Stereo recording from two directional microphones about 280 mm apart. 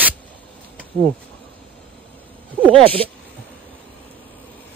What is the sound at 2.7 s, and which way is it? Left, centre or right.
Speech, centre.